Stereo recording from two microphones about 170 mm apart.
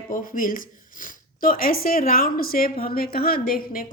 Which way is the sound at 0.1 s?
50° left (ahead or behind).